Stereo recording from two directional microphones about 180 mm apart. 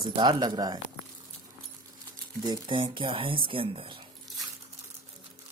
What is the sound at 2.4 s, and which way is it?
Speech, 25° right (ahead or behind).